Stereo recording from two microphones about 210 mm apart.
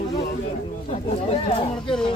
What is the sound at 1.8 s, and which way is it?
Speech, 5° left (ahead or behind).